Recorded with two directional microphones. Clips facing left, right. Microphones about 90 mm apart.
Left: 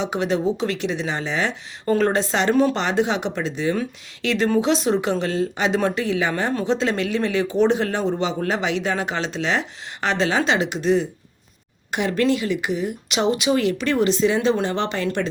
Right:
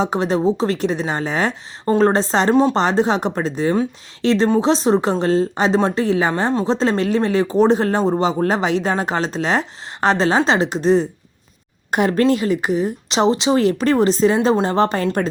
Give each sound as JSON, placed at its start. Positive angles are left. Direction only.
{"t": 0.0, "sound": "speech", "side_deg": -35}